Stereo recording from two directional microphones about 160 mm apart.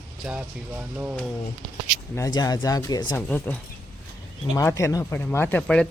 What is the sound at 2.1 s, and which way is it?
Speech, 25° left (ahead or behind).